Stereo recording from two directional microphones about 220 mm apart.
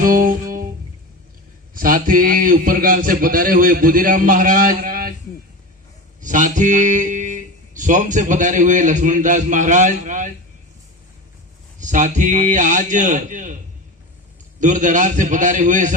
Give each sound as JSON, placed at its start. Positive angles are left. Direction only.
{"t": 0.0, "sound": "music", "side_deg": -40}
{"t": 1.7, "sound": "speech", "side_deg": -40}
{"t": 6.2, "sound": "speech", "side_deg": -35}
{"t": 11.8, "sound": "speech", "side_deg": -35}
{"t": 14.6, "sound": "speech", "side_deg": -35}